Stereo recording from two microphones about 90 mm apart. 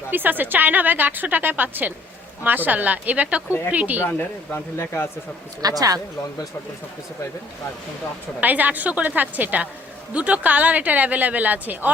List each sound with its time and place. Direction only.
0.1 s a woman's voice: 20° right (ahead or behind)
4.0 s speech: 25° left (ahead or behind)
5.6 s speech: 40° right (ahead or behind)
8.4 s a woman's voice: 20° right (ahead or behind)